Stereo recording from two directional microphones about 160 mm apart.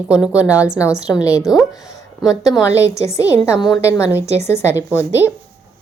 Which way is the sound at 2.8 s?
20° left (ahead or behind).